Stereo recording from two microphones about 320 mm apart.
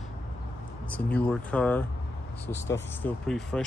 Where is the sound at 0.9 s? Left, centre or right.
Centre.